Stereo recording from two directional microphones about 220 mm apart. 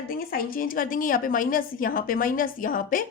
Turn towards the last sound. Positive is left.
turn(degrees=40)  # may be behind; listen again after turning